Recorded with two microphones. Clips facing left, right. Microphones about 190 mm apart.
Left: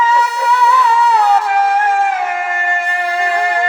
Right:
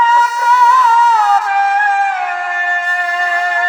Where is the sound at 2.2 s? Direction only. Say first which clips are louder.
Left 1 dB; 10° left (ahead or behind).